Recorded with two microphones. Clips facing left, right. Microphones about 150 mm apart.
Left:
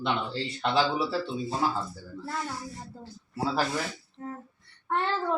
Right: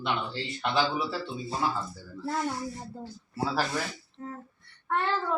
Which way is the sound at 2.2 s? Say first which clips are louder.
Right 5 dB; 20° right (ahead or behind).